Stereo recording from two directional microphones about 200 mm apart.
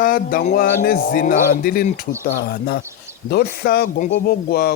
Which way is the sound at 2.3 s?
60° left (ahead or behind).